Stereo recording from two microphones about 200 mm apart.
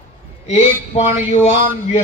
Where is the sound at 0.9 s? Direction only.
30° left (ahead or behind).